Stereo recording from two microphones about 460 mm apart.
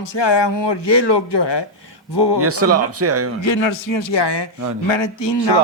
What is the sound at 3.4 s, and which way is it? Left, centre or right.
A man's voice, left.